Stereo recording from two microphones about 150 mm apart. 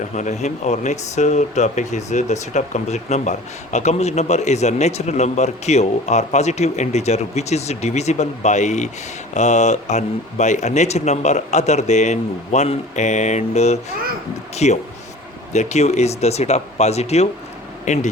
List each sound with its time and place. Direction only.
0.2 s speech: 50° left (ahead or behind)